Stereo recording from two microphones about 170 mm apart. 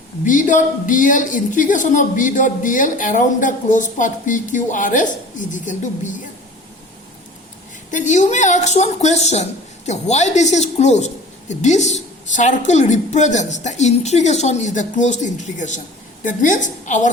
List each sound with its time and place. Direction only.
0.3 s a woman's voice: 50° left (ahead or behind)
7.9 s a woman's voice: 45° left (ahead or behind)